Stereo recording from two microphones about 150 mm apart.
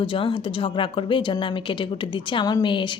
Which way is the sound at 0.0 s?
35° left (ahead or behind).